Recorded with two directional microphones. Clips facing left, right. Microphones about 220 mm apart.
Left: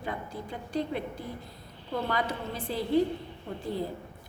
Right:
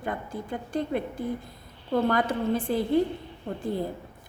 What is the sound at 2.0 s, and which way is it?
A woman's voice, 50° right (ahead or behind).